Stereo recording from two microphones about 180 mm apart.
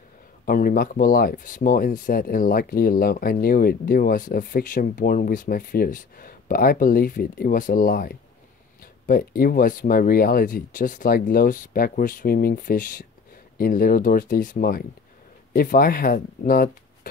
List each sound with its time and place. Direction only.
0.5 s speech: 55° left (ahead or behind)